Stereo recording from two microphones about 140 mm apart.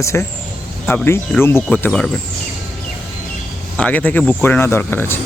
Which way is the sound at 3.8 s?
10° left (ahead or behind).